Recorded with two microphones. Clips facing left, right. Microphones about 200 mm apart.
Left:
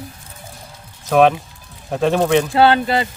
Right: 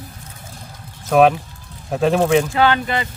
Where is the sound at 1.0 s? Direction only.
Centre (ahead or behind).